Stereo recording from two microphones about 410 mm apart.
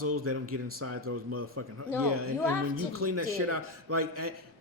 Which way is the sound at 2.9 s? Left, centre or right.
Right.